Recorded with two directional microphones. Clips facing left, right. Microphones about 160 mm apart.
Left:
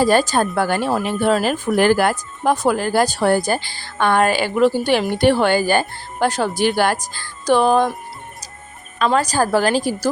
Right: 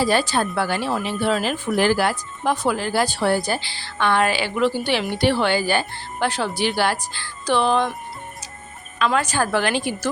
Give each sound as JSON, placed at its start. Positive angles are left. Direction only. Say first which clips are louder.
{"t": 0.0, "sound": "speech", "louder": "left 4 dB", "side_deg": 45}
{"t": 9.0, "sound": "a woman's voice", "louder": "left 3 dB", "side_deg": 40}